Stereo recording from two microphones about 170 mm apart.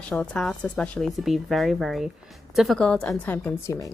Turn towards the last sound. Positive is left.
turn(degrees=15)  # may be behind; listen again after turning